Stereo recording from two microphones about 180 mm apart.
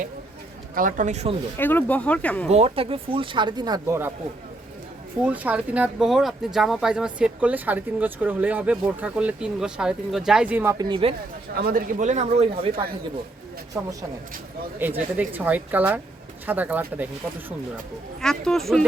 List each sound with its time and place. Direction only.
0.8 s a man's voice: 50° right (ahead or behind)
1.5 s speech: 10° left (ahead or behind)
2.5 s speech: 35° right (ahead or behind); by 4.1 s 15° right (ahead or behind)
5.2 s speech: 10° right (ahead or behind); by 11.1 s 25° right (ahead or behind)
11.5 s a man's voice: 55° right (ahead or behind); by 12.9 s 35° right (ahead or behind)
13.7 s speech: 10° right (ahead or behind)
18.2 s speech: 5° left (ahead or behind)